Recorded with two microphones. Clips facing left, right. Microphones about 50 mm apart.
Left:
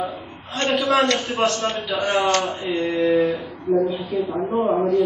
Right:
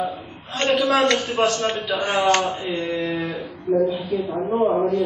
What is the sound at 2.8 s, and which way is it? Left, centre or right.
Speech, left.